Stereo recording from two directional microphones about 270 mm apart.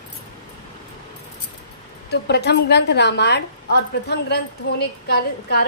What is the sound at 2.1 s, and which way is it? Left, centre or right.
A woman's voice, left.